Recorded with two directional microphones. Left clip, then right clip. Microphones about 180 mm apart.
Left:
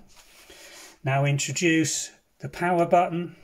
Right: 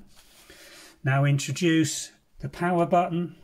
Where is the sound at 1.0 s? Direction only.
15° right (ahead or behind).